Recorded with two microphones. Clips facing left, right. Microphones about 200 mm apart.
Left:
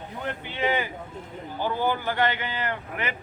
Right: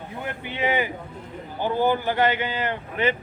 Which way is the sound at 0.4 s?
15° right (ahead or behind).